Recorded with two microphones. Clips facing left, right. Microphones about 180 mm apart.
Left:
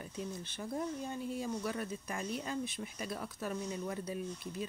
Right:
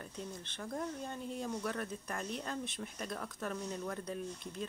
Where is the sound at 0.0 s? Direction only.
10° left (ahead or behind).